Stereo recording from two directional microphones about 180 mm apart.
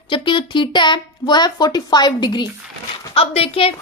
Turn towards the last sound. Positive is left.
turn(degrees=30)  # may be behind; listen again after turning